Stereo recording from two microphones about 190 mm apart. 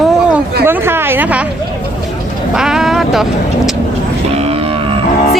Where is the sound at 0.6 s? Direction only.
10° right (ahead or behind).